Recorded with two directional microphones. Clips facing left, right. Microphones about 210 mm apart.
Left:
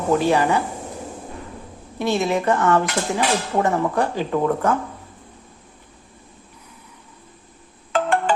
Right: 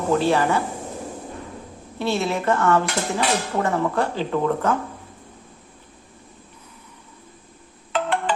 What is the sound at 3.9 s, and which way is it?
Speech, 15° left (ahead or behind).